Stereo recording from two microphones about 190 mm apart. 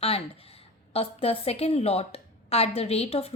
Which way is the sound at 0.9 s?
30° left (ahead or behind).